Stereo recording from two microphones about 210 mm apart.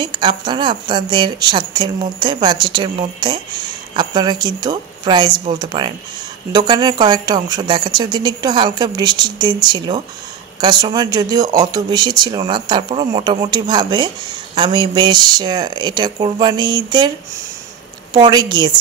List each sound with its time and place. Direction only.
0.0 s speech: 20° right (ahead or behind)
18.1 s speech: 20° right (ahead or behind)